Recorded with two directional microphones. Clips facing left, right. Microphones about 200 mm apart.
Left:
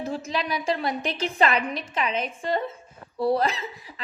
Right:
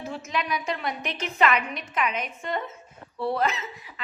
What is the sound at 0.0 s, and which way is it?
A woman's voice, 35° left (ahead or behind).